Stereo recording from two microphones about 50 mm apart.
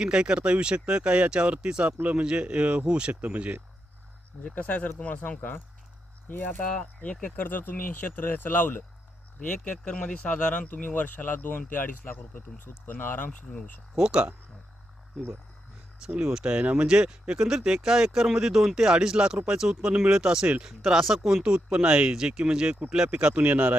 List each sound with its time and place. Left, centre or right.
0.0 s speech: centre
4.5 s speech: left
7.3 s speech: left
9.7 s speech: left
13.9 s speech: centre
16.2 s speech: centre
21.4 s speech: centre